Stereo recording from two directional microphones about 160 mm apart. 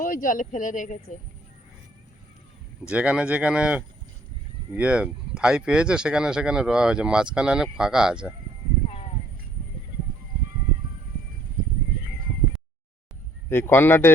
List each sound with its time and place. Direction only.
0.0 s speech: 55° left (ahead or behind)
2.8 s speech: 5° right (ahead or behind)
13.5 s speech: 15° left (ahead or behind)